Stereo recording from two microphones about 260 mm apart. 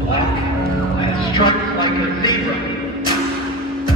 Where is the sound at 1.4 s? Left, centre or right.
Centre.